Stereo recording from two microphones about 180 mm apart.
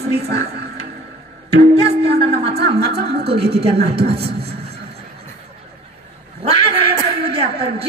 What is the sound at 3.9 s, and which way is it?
Speech, 30° right (ahead or behind).